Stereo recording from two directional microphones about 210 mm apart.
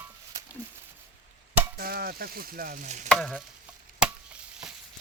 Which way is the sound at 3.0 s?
Centre (ahead or behind).